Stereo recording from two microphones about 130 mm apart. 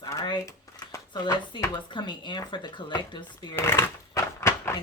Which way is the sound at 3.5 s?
20° left (ahead or behind).